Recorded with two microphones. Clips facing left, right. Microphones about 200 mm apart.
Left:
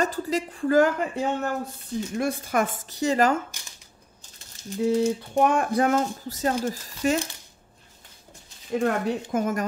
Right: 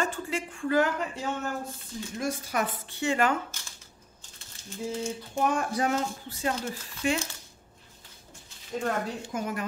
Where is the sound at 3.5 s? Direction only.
15° left (ahead or behind).